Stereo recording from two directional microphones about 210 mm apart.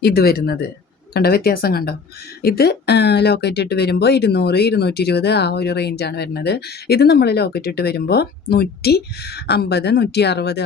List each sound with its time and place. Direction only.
0.0 s speech: 50° left (ahead or behind)